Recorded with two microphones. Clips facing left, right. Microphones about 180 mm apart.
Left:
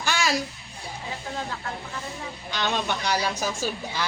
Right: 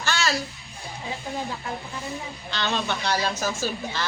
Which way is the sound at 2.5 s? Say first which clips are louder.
Even; 15° left (ahead or behind).